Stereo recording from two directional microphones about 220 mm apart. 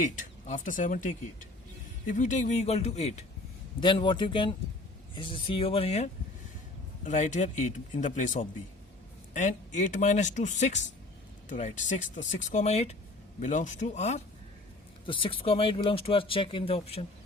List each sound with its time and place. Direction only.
0.0 s speech: 35° left (ahead or behind)